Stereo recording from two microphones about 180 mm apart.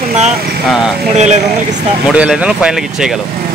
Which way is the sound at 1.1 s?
40° right (ahead or behind).